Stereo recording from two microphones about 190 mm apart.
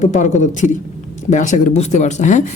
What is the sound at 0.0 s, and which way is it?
A woman's voice, 40° left (ahead or behind).